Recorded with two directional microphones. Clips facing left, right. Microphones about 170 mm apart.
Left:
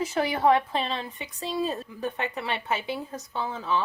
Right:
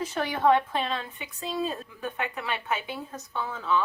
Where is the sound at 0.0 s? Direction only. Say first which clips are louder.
Left 2 dB; 10° left (ahead or behind).